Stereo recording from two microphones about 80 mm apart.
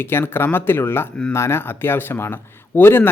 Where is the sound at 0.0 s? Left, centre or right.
Left.